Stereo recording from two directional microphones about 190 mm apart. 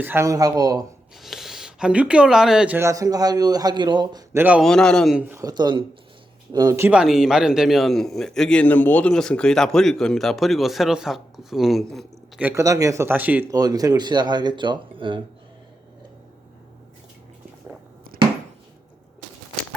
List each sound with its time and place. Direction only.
0.0 s speech: 10° right (ahead or behind)
1.2 s speech: centre (ahead or behind); by 4.4 s 20° right (ahead or behind)
4.4 s a man's voice: 5° right (ahead or behind)
4.7 s a man's voice: 5° left (ahead or behind)
12.5 s speech: 15° right (ahead or behind)